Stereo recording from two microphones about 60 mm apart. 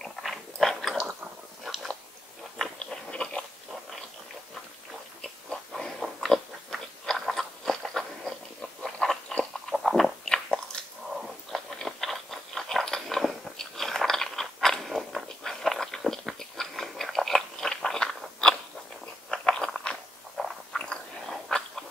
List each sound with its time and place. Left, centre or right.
0.2 s biting: centre
3.1 s biting: centre
5.2 s pig: centre
9.4 s biting: centre
11.1 s biting: centre
19.3 s crunch: centre
20.4 s a sound: centre
20.7 s biting: centre